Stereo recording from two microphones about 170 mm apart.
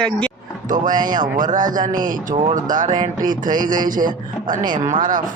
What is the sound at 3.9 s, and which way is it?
Speech, 50° right (ahead or behind).